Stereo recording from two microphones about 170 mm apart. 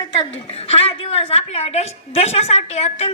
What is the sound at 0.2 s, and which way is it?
A woman's voice, 35° left (ahead or behind).